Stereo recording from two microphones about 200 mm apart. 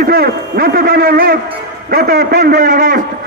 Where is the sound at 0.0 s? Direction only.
50° right (ahead or behind).